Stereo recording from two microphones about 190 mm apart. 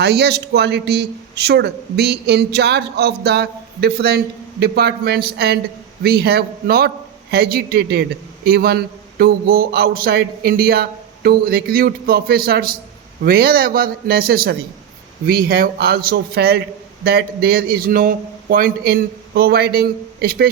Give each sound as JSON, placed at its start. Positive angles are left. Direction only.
{"t": 0.0, "sound": "a man's voice", "side_deg": -60}